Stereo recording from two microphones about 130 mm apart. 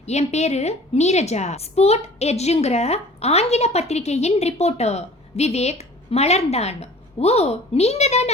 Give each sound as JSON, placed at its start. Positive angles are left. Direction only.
{"t": 0.0, "sound": "a woman's voice", "side_deg": 60}